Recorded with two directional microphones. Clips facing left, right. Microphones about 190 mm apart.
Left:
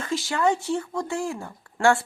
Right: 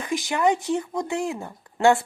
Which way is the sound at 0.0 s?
15° right (ahead or behind).